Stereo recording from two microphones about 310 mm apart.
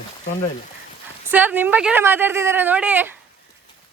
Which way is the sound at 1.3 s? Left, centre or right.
Centre.